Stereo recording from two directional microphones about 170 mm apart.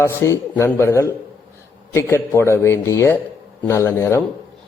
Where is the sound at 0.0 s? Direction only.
15° left (ahead or behind).